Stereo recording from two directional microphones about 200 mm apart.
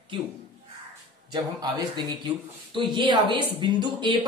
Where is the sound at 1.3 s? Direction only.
20° right (ahead or behind).